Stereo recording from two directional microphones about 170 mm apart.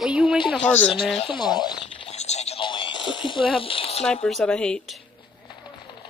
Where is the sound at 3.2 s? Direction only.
30° left (ahead or behind).